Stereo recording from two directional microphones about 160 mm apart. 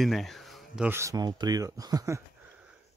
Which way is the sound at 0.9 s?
20° right (ahead or behind).